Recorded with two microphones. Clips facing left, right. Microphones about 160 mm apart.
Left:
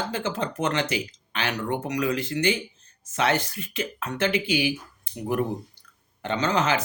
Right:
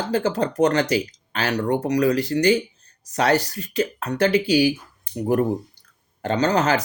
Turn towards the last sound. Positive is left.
turn(degrees=-40)  # may be behind; listen again after turning